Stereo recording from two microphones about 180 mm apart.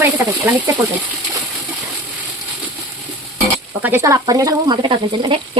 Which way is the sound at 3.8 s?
15° right (ahead or behind).